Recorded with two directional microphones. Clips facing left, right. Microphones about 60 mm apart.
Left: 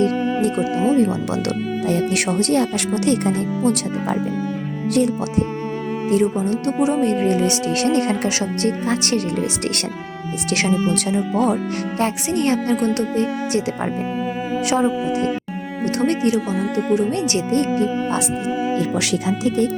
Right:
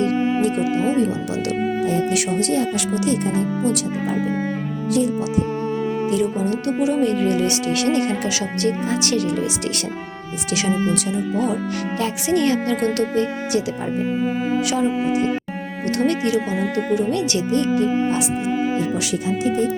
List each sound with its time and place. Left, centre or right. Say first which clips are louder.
0.0 s music: even; right
0.5 s speech: left 2 dB; right
1.3 s speech: even; left
2.0 s speech: left 1 dB; left
4.9 s speech: left 1 dB; left
6.1 s speech: left 5 dB; left
14.8 s speech: even; right
16.0 s speech: left 1 dB; left
16.5 s speech: left 1 dB; right
16.9 s speech: left 2 dB; left
17.8 s speech: right 2 dB; right
18.8 s speech: left 2 dB; left